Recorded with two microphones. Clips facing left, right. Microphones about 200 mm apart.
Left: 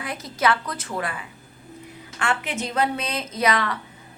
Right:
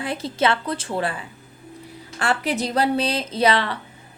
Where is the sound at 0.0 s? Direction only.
30° right (ahead or behind).